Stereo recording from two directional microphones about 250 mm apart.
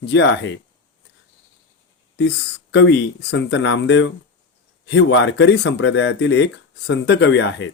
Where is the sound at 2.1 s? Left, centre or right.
Left.